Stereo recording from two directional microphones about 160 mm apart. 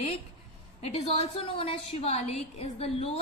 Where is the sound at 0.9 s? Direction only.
40° left (ahead or behind).